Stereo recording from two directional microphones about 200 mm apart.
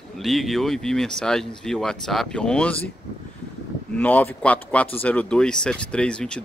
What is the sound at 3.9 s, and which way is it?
Speech, 10° left (ahead or behind).